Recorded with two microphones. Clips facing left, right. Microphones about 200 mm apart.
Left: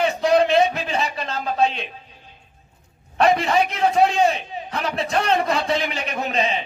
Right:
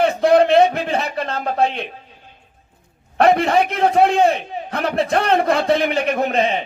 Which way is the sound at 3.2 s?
55° right (ahead or behind).